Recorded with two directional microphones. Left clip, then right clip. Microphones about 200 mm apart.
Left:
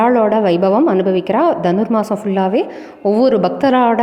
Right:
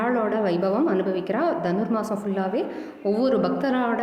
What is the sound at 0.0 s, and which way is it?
A woman's voice, 35° left (ahead or behind).